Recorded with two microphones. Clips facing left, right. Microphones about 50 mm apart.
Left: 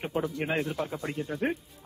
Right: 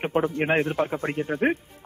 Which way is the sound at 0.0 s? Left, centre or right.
Right.